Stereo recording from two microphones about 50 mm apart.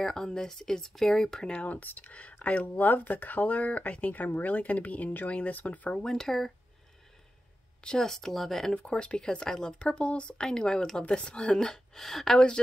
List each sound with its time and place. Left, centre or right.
0.0 s speech: centre
1.5 s speech: left
5.9 s speech: centre
7.8 s speech: centre
8.7 s speech: left